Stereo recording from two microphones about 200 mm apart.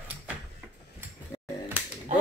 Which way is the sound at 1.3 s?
15° left (ahead or behind).